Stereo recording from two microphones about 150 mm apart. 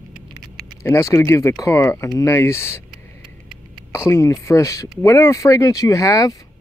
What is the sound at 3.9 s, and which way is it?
Speech, 20° left (ahead or behind).